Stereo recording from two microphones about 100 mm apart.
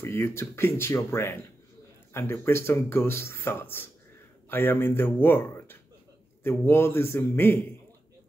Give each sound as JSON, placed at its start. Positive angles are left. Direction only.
{"t": 0.0, "sound": "speech", "side_deg": 25}